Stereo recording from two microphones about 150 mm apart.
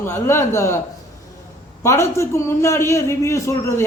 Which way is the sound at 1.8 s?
20° left (ahead or behind).